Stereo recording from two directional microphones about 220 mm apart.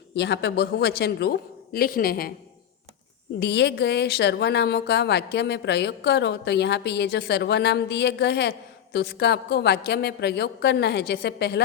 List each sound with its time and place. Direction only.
0.1 s a woman's voice: 50° left (ahead or behind)
3.4 s a woman's voice: 50° left (ahead or behind)